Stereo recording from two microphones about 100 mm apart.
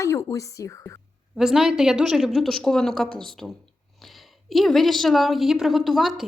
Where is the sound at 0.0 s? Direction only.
30° left (ahead or behind).